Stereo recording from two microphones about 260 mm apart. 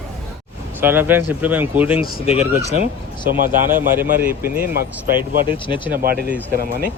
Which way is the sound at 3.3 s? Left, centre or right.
Right.